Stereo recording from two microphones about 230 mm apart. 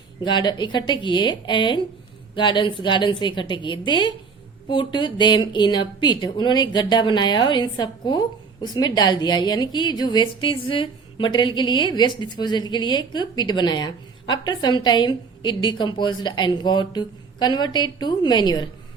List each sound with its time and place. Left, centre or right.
0.3 s a woman's voice: centre